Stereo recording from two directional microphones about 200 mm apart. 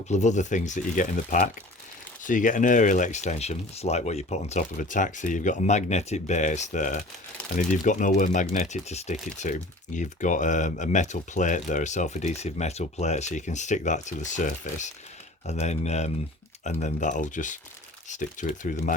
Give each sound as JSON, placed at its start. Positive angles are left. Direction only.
{"t": 0.1, "sound": "speech", "side_deg": 35}